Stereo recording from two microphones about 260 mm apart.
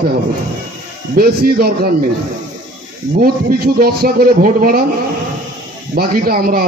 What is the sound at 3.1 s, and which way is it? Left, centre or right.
A man's voice, right.